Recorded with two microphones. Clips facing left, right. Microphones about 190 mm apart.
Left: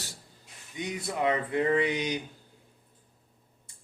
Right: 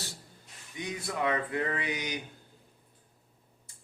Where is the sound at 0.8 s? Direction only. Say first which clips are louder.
Left 2 dB; 20° left (ahead or behind).